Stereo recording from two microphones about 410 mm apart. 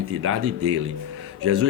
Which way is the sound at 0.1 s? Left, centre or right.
Right.